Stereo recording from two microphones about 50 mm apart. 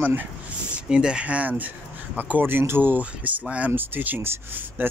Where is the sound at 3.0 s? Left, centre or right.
Right.